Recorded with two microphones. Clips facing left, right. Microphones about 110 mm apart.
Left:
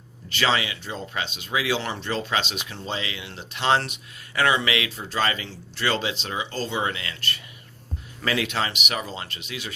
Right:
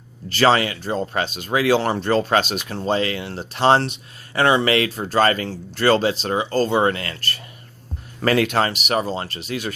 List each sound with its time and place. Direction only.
0.3 s speech: 40° right (ahead or behind)